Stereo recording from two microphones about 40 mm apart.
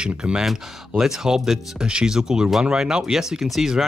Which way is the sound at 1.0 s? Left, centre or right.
Centre.